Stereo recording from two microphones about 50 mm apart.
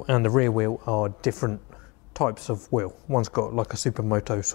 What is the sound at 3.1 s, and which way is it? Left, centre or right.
Speech, centre.